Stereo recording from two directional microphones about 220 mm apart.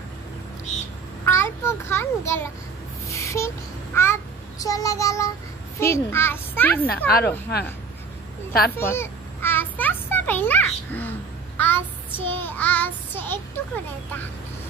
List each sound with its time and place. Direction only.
1.2 s a child's voice: 10° left (ahead or behind)
3.1 s child singing: 15° left (ahead or behind)
5.8 s a child's voice: 10° left (ahead or behind)
7.1 s speech: 45° left (ahead or behind)
8.7 s a sound: 10° left (ahead or behind)
12.3 s a child's voice: 10° left (ahead or behind)